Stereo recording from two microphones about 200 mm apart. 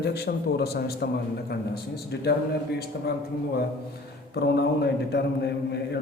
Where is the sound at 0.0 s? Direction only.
55° left (ahead or behind).